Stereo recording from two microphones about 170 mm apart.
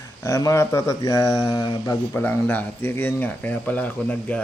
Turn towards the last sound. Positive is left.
turn(degrees=10)  # may be behind; listen again after turning